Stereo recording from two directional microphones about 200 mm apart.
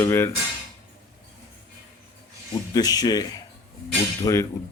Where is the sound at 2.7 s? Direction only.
20° left (ahead or behind).